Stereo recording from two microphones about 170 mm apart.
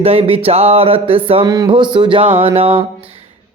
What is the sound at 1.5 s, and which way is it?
Speech, 25° right (ahead or behind).